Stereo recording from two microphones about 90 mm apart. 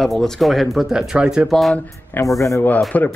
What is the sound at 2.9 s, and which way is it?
Speech, 20° left (ahead or behind).